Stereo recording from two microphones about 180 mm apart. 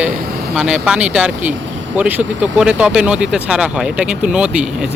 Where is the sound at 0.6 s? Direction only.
5° right (ahead or behind).